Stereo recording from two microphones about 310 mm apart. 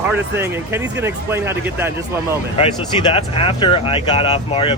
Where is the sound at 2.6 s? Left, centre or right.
Centre.